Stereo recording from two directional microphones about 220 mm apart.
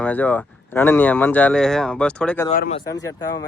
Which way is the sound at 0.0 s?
5° left (ahead or behind).